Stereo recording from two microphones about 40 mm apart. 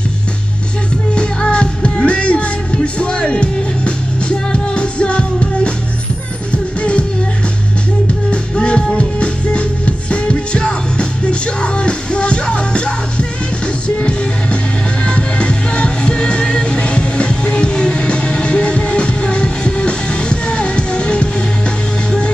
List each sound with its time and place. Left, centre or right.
1.1 s music: left
6.8 s music: left
8.3 s music: left